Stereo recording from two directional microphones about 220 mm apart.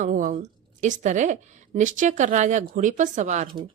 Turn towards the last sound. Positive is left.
turn(degrees=-35)  # may be behind; listen again after turning